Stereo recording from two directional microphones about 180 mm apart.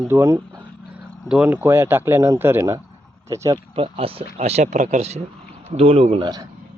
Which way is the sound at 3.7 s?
30° right (ahead or behind).